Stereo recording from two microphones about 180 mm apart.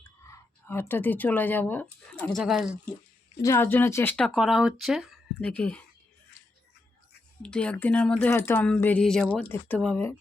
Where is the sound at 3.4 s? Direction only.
15° left (ahead or behind).